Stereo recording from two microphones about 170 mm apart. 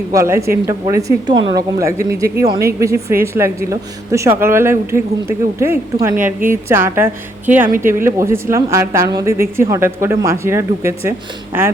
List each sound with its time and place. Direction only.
0.1 s a woman's voice: 15° right (ahead or behind)